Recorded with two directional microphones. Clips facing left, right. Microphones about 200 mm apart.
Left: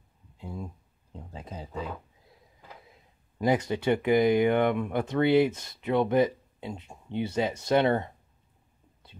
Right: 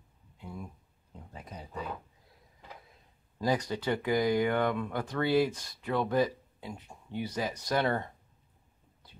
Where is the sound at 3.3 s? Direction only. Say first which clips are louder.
Left 4 dB; 25° left (ahead or behind).